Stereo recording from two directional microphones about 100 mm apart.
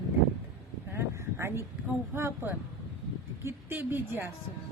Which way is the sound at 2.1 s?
25° right (ahead or behind).